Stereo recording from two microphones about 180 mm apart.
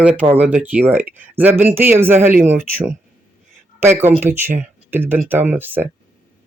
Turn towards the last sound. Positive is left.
turn(degrees=-10)  # may be behind; listen again after turning